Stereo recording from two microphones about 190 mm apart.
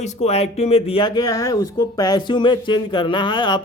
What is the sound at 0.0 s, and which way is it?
A man's voice, 35° left (ahead or behind).